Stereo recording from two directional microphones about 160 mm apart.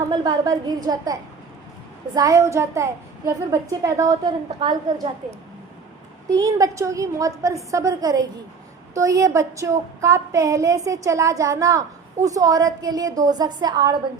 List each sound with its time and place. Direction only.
0.1 s a child's voice: 25° right (ahead or behind)
6.3 s a child's voice: 20° right (ahead or behind)